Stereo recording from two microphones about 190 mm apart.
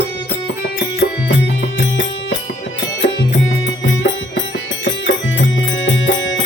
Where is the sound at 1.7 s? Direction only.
75° left (ahead or behind).